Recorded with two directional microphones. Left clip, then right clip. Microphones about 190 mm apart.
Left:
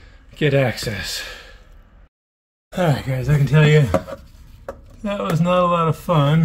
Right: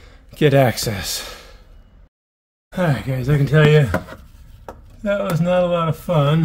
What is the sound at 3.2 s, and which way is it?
Speech, 15° right (ahead or behind).